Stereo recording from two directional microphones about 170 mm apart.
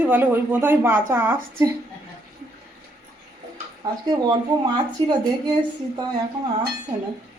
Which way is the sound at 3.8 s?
25° right (ahead or behind).